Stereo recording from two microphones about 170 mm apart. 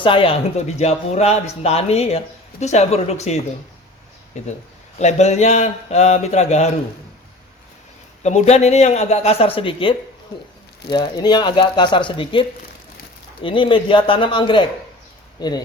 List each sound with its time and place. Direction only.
0.0 s speech: 30° left (ahead or behind)
4.9 s speech: 40° left (ahead or behind)
8.2 s speech: 45° left (ahead or behind); by 15.6 s 25° left (ahead or behind)